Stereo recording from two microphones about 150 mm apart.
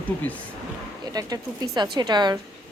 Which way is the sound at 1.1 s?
25° right (ahead or behind).